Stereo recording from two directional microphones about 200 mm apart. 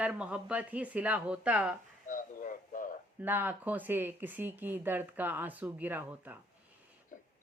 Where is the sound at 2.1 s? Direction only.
40° left (ahead or behind).